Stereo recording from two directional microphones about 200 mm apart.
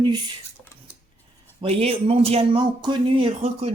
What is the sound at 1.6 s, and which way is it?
Speech, 30° right (ahead or behind).